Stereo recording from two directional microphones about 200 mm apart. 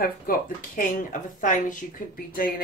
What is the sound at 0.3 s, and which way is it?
Speech, 40° left (ahead or behind).